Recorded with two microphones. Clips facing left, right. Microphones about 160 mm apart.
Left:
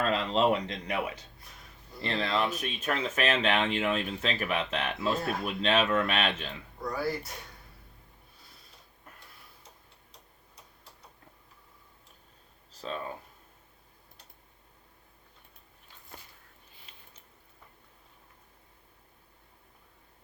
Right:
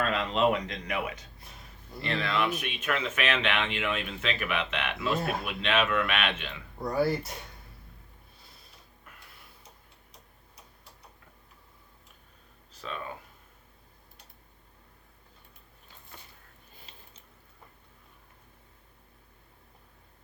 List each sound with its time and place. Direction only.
0.1 s speech: 30° left (ahead or behind)
6.8 s speech: 25° right (ahead or behind)